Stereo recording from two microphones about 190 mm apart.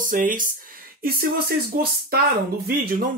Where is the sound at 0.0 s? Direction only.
45° right (ahead or behind).